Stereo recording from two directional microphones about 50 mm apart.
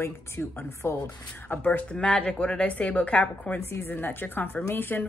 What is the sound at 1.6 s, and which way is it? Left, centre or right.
A woman's voice, left.